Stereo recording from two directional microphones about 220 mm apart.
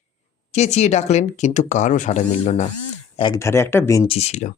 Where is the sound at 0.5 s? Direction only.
30° left (ahead or behind).